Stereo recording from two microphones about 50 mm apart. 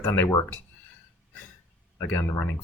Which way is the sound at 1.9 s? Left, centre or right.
Left.